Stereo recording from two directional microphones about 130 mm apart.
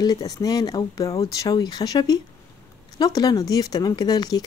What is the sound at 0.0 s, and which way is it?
Speech, 30° left (ahead or behind).